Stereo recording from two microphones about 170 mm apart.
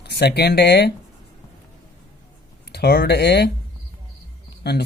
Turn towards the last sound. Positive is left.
turn(degrees=70)  # may be behind; listen again after turning